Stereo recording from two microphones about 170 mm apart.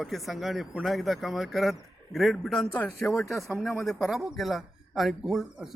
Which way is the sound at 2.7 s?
10° left (ahead or behind).